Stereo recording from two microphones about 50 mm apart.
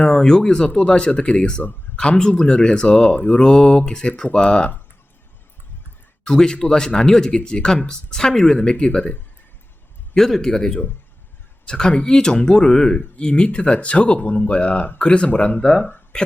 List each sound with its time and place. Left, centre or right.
0.0 s speech: centre
6.2 s speech: centre
10.2 s speech: centre; by 15.6 s left